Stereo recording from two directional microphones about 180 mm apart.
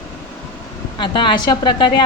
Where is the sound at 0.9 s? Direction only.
25° left (ahead or behind).